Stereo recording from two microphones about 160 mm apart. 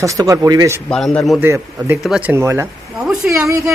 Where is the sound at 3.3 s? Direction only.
20° right (ahead or behind).